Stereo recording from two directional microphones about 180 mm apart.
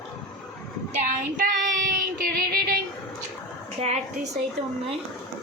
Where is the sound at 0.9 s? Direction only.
50° right (ahead or behind).